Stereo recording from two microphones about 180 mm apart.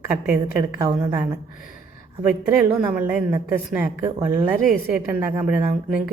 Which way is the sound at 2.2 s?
10° right (ahead or behind).